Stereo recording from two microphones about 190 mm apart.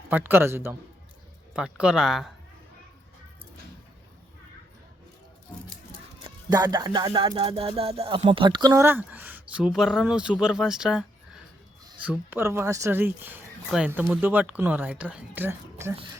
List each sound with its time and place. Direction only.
0.1 s speech: 10° right (ahead or behind)
6.2 s music: 20° right (ahead or behind); by 11.0 s 5° right (ahead or behind)
12.0 s speech: 10° right (ahead or behind)